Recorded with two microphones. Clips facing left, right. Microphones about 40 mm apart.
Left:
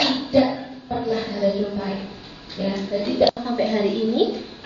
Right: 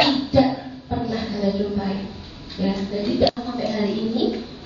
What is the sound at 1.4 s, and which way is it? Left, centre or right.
A woman's voice, centre.